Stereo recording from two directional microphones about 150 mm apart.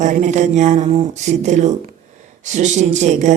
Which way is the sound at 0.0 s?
50° right (ahead or behind).